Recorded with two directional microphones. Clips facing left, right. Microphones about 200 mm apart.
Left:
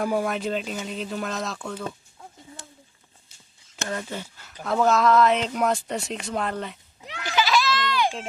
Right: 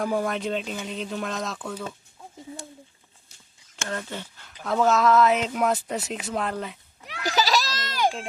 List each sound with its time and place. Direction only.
0.0 s speech: 5° left (ahead or behind)
3.8 s speech: 10° left (ahead or behind)
7.2 s goat: 40° right (ahead or behind)